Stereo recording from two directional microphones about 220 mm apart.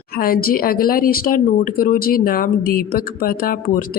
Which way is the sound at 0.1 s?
40° left (ahead or behind).